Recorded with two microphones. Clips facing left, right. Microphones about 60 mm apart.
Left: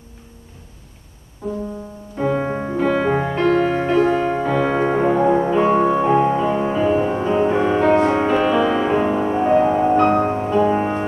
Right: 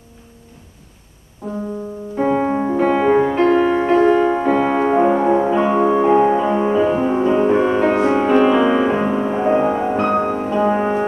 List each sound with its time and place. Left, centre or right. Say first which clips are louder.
2.1 s music: right 3 dB; centre
2.4 s music: right 5 dB; centre
2.8 s music: right 3 dB; centre
7.6 s music: even; centre